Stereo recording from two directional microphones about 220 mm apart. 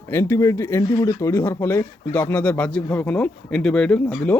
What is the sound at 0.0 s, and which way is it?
Speech, 10° left (ahead or behind).